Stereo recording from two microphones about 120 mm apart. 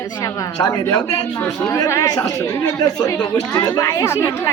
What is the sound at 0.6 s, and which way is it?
Speech, 25° left (ahead or behind).